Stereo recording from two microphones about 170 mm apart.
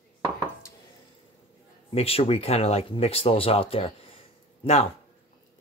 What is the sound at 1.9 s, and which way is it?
Speech, 35° left (ahead or behind).